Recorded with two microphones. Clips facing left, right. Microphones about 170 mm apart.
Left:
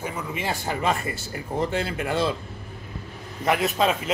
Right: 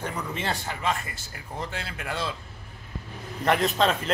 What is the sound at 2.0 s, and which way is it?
Speech, 5° left (ahead or behind).